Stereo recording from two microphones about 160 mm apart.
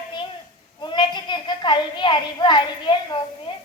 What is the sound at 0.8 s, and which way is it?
A woman's voice, 30° left (ahead or behind).